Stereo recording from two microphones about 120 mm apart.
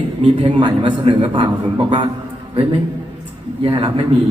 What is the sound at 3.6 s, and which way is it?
Speech, 50° right (ahead or behind).